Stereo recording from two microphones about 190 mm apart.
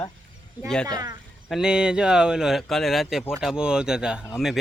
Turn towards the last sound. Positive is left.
turn(degrees=0)  # may be behind; listen again after turning